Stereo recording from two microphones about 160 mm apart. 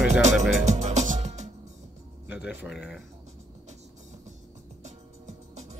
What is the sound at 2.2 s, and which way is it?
Speech, 10° right (ahead or behind).